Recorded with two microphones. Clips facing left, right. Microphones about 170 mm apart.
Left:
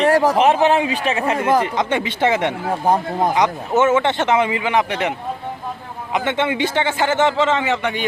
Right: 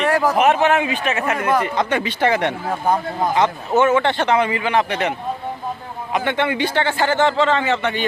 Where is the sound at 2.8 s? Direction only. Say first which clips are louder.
Left 2 dB; 30° left (ahead or behind).